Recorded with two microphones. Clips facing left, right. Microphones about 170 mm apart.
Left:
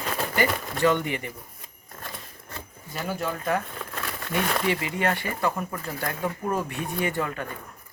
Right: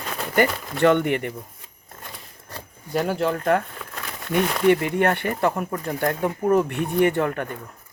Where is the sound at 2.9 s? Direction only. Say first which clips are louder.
Right 8 dB; 70° right (ahead or behind).